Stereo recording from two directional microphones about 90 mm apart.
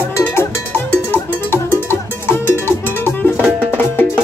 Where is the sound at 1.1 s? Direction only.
25° left (ahead or behind).